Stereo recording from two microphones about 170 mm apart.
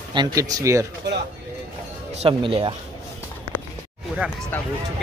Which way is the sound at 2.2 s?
30° right (ahead or behind).